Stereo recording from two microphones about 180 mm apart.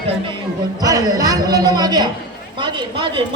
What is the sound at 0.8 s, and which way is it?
A man's voice, 20° right (ahead or behind).